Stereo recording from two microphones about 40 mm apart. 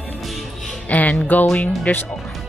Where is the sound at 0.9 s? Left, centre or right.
Left.